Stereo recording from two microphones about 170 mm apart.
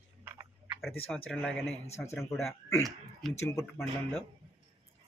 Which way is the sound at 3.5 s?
15° left (ahead or behind).